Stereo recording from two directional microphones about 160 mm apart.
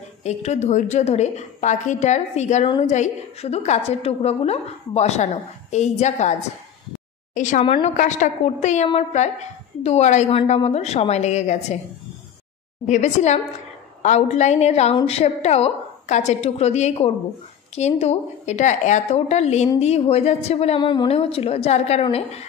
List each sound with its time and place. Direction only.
0.2 s a woman's voice: 45° left (ahead or behind)
2.6 s a woman's voice: 35° left (ahead or behind)
2.9 s a woman's voice: 45° left (ahead or behind)
7.3 s a woman's voice: 50° left (ahead or behind)
7.6 s a woman's voice: 35° left (ahead or behind)
7.9 s a woman's voice: 50° left (ahead or behind)
12.8 s a woman's voice: 50° left (ahead or behind)